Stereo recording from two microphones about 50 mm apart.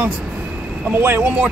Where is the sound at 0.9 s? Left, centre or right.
Right.